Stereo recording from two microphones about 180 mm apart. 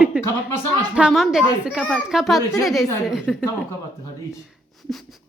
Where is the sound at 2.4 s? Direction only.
20° left (ahead or behind).